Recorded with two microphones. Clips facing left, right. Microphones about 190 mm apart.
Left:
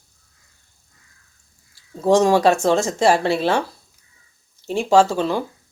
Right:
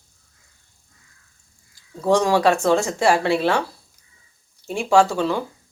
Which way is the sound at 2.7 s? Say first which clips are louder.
Left 1 dB; 40° left (ahead or behind).